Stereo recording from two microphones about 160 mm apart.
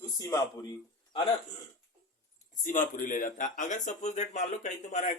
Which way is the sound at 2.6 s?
55° left (ahead or behind).